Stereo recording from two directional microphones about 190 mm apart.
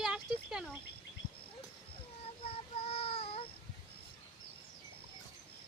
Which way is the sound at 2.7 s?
30° left (ahead or behind).